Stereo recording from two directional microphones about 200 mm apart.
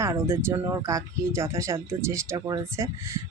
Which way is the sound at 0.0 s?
15° right (ahead or behind).